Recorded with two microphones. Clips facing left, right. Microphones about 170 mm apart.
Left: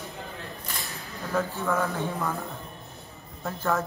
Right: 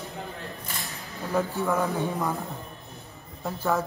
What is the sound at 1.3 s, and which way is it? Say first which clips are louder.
Speech: right 2 dB; 15° right (ahead or behind).